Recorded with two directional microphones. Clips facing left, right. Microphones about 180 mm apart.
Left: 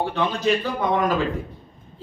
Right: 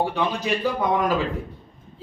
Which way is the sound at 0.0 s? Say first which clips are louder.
Left 2 dB; 10° right (ahead or behind).